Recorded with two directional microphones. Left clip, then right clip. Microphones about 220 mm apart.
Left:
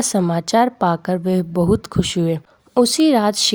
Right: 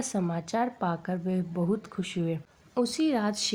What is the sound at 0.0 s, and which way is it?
A woman's voice, 45° left (ahead or behind).